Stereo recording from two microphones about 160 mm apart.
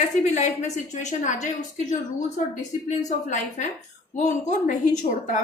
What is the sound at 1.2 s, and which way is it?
Speech, 50° left (ahead or behind).